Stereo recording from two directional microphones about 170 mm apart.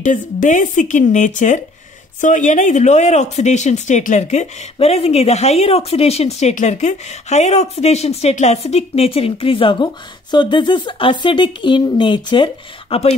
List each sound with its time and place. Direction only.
0.0 s speech: 45° left (ahead or behind)